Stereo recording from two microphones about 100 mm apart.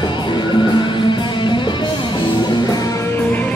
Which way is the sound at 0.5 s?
50° left (ahead or behind).